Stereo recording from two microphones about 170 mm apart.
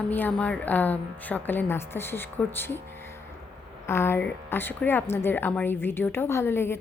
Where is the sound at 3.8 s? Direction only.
15° left (ahead or behind).